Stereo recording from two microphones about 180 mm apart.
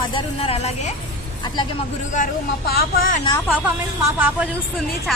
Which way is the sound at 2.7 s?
50° left (ahead or behind).